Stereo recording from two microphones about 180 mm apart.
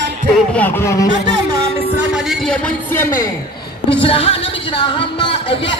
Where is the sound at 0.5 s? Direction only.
10° left (ahead or behind).